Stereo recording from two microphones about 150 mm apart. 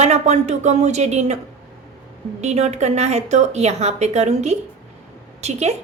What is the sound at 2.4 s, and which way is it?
A woman's voice, 50° right (ahead or behind).